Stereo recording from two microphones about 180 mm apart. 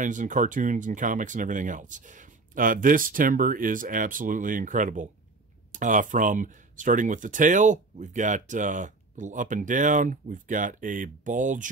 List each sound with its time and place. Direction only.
0.0 s speech: 45° right (ahead or behind)